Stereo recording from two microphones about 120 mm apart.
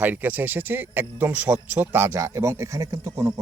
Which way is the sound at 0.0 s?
15° right (ahead or behind).